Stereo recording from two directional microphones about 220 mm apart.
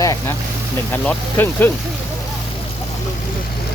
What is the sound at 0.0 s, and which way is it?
Vehicle, 15° left (ahead or behind).